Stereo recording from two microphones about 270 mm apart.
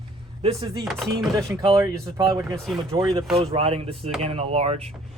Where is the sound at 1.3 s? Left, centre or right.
Centre.